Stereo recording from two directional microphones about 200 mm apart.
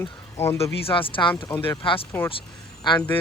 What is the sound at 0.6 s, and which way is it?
Speech, 25° left (ahead or behind).